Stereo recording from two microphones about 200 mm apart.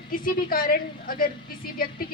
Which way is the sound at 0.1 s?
45° left (ahead or behind).